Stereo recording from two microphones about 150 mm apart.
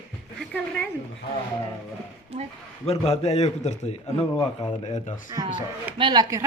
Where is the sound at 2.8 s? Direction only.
45° left (ahead or behind).